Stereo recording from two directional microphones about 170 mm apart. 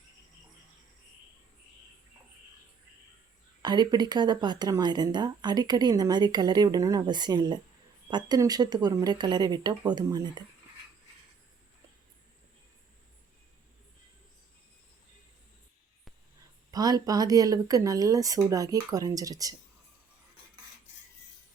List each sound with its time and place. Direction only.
3.6 s speech: 25° right (ahead or behind)
16.7 s speech: 20° right (ahead or behind)